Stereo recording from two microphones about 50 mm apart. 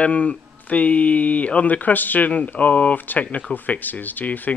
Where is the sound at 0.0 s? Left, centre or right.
Left.